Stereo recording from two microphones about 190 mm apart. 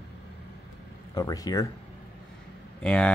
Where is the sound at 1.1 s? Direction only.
20° left (ahead or behind).